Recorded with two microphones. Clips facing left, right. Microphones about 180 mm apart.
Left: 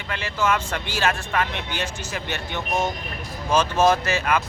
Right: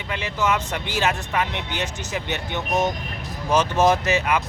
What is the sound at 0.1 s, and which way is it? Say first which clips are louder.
Speech: even; 20° right (ahead or behind).